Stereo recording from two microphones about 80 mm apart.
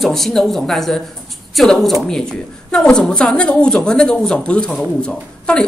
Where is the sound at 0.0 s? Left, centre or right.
Centre.